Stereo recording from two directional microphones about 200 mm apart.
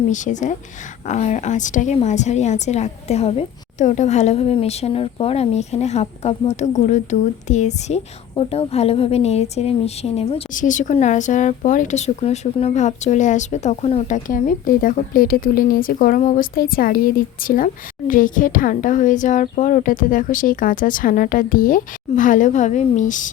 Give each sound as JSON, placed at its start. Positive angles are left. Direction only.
{"t": 0.1, "sound": "a woman's voice", "side_deg": 40}